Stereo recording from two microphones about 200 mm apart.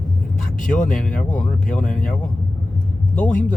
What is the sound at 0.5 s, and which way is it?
Speech, 40° left (ahead or behind).